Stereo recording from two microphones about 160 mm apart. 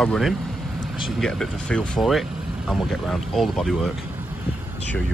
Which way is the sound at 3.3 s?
Centre (ahead or behind).